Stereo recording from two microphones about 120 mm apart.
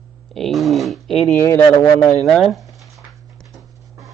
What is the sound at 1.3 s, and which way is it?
Speech, 20° left (ahead or behind).